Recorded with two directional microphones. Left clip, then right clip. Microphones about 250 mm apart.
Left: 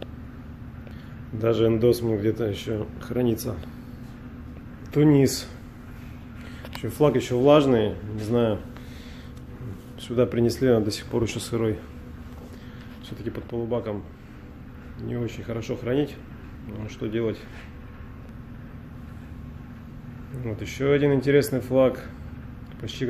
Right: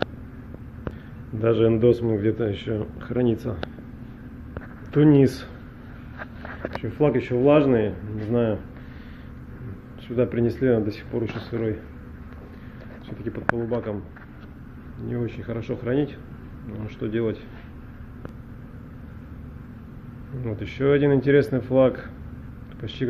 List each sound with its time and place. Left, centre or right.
1.4 s speech: centre
4.9 s speech: centre
6.8 s speech: centre
10.0 s speech: centre
13.6 s speech: centre
15.0 s speech: centre
20.4 s speech: centre